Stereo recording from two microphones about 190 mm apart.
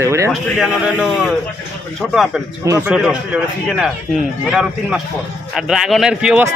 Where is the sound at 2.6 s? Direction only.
15° right (ahead or behind).